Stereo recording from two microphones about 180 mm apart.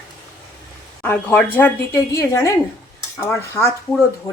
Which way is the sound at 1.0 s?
10° left (ahead or behind).